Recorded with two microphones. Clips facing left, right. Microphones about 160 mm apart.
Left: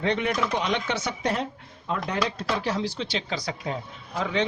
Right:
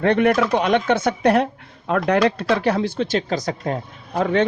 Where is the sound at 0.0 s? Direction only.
55° right (ahead or behind).